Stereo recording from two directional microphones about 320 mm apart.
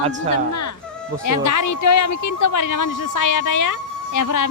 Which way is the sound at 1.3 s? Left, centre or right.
Left.